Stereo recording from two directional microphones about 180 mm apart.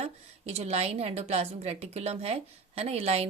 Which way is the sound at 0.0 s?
35° right (ahead or behind).